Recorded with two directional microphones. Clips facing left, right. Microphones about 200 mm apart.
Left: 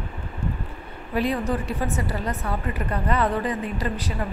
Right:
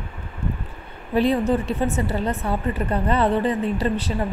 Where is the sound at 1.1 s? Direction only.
25° right (ahead or behind).